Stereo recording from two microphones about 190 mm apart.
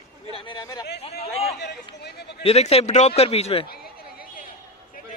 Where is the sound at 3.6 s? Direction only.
55° left (ahead or behind).